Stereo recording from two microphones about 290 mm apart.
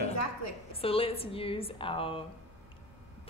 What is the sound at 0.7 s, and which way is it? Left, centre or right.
Speech, centre.